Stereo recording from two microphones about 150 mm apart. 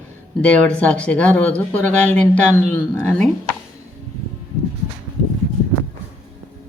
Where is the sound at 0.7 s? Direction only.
10° left (ahead or behind).